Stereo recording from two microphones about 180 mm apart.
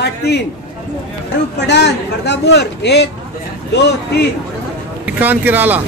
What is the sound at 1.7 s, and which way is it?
A man's voice, 70° left (ahead or behind).